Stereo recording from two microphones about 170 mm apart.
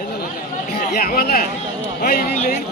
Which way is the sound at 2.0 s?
60° left (ahead or behind).